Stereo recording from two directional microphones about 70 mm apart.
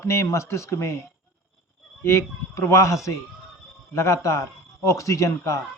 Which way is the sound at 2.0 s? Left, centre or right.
Left.